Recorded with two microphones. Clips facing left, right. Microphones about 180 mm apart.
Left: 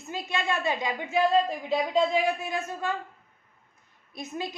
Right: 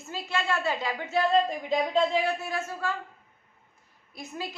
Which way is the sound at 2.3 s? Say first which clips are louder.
Left 1 dB; 20° left (ahead or behind).